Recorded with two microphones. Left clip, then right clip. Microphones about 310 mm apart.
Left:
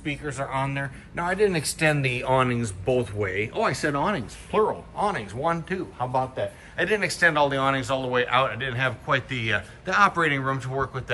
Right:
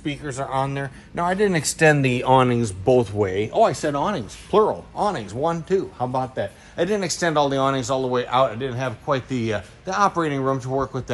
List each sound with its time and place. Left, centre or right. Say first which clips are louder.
0.0 s speech: right 2 dB; centre